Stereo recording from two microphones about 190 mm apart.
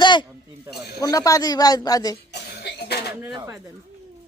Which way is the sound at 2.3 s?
60° left (ahead or behind).